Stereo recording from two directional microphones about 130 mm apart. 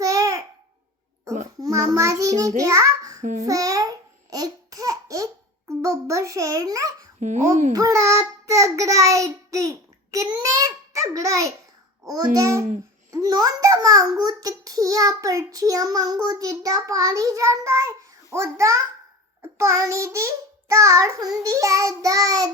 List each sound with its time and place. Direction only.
0.0 s babbling: 25° right (ahead or behind)
1.5 s a child's voice: 25° right (ahead or behind)
7.2 s a child's voice: 70° right (ahead or behind)
7.7 s child singing: 25° right (ahead or behind)
12.0 s a child's voice: 25° right (ahead or behind)